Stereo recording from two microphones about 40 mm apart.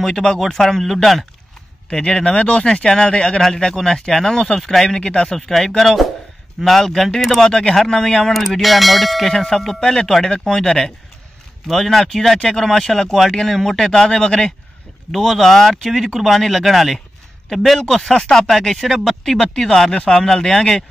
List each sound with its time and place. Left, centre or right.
0.0 s speech: centre
1.9 s speech: centre
5.8 s speech: centre
7.4 s speech: centre
11.7 s speech: centre
15.0 s a man's voice: centre
19.4 s speech: centre